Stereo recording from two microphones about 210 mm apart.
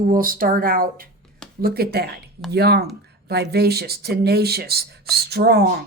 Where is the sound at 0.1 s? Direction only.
40° right (ahead or behind).